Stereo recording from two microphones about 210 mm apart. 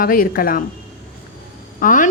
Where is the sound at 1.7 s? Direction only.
40° left (ahead or behind).